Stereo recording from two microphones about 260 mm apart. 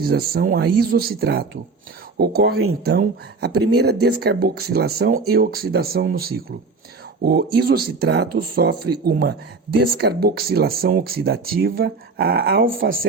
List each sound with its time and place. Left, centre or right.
0.0 s speech: right